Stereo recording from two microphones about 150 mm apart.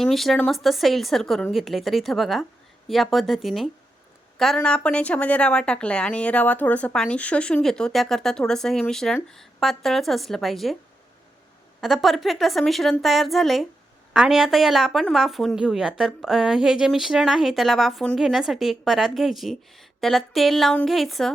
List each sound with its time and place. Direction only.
0.0 s a woman's voice: centre (ahead or behind)
11.8 s a woman's voice: centre (ahead or behind)